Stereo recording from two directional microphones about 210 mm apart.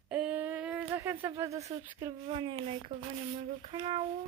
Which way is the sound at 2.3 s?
25° right (ahead or behind).